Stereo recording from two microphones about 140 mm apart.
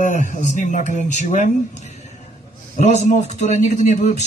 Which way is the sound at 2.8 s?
55° left (ahead or behind).